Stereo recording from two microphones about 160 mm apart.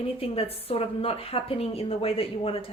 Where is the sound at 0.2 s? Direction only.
35° left (ahead or behind).